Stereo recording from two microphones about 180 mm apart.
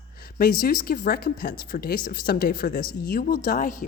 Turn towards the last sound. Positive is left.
turn(degrees=50)  # may be behind; listen again after turning